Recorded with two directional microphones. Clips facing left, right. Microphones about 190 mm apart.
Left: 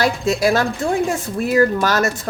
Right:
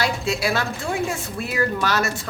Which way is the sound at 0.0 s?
45° left (ahead or behind).